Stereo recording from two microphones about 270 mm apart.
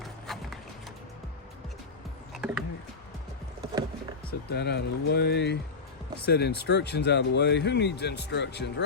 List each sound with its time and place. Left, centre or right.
0.0 s clip-clop: centre
2.3 s speech: centre
4.3 s speech: left